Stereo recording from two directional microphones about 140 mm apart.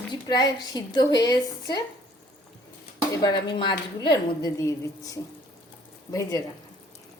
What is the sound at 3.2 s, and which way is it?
A woman's voice, 35° left (ahead or behind).